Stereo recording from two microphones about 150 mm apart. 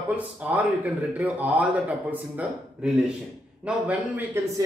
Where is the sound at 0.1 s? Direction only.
10° right (ahead or behind).